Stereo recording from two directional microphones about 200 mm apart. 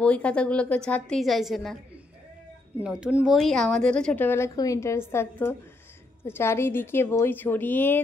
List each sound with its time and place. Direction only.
0.0 s a woman's voice: 5° left (ahead or behind)
2.8 s a woman's voice: 5° right (ahead or behind)